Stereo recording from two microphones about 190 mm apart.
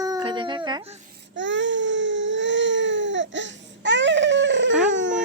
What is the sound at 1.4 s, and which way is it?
Baby cry, 75° right (ahead or behind).